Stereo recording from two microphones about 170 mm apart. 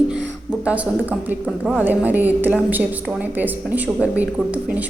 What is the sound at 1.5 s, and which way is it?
Speech, 5° left (ahead or behind).